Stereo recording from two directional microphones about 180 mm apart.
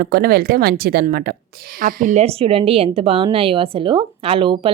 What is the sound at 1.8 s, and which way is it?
Speech, 45° right (ahead or behind).